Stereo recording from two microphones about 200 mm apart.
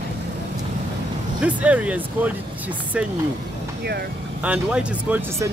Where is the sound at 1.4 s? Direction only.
5° right (ahead or behind).